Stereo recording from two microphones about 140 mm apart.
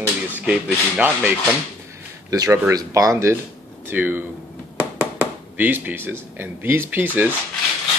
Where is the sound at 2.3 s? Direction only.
25° right (ahead or behind).